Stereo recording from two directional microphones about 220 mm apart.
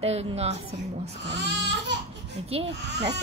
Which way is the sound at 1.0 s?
50° right (ahead or behind).